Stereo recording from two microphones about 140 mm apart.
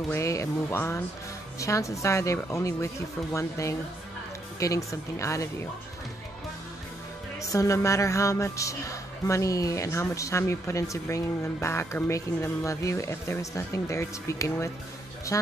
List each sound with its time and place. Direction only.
0.1 s a woman's voice: 20° left (ahead or behind)
7.5 s a woman's voice: 20° left (ahead or behind)